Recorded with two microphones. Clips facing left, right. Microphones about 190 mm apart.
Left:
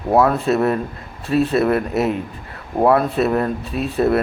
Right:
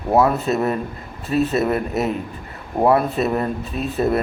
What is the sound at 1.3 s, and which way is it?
A man's voice, centre (ahead or behind).